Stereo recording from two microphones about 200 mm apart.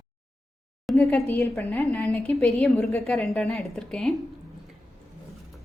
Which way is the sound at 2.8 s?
Centre (ahead or behind).